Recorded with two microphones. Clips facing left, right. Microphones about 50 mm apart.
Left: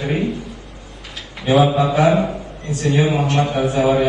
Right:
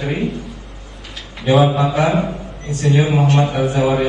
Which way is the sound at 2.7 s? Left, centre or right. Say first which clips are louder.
Right 2 dB; right.